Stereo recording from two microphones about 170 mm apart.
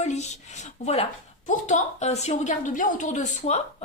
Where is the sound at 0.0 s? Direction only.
40° left (ahead or behind).